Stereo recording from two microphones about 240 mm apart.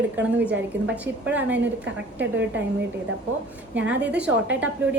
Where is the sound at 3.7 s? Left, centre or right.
Centre.